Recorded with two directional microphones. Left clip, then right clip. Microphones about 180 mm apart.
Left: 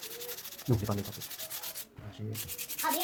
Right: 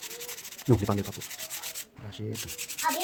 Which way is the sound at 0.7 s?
50° right (ahead or behind).